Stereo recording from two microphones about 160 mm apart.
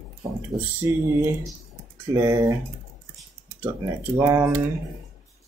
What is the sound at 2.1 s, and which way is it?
Speech, 20° right (ahead or behind).